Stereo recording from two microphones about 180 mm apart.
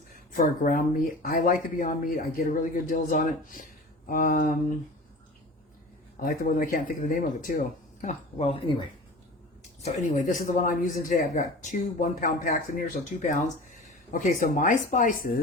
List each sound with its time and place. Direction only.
0.3 s speech: 50° left (ahead or behind)
6.1 s speech: 55° left (ahead or behind)
8.0 s speech: 35° left (ahead or behind)
9.8 s speech: 40° left (ahead or behind)